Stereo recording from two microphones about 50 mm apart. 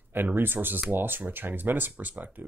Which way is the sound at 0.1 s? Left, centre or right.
Right.